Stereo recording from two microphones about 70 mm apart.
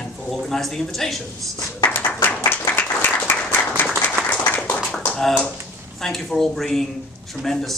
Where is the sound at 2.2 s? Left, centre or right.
Left.